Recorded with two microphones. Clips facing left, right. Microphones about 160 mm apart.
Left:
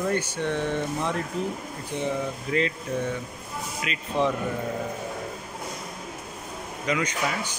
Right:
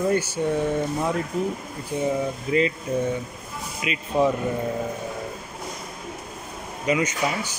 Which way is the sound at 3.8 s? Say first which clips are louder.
Right 4 dB; 10° right (ahead or behind).